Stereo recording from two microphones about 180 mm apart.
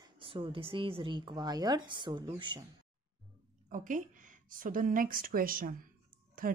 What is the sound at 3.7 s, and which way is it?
Speech, 45° right (ahead or behind).